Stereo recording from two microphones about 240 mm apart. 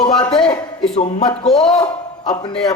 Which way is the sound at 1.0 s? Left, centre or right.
Left.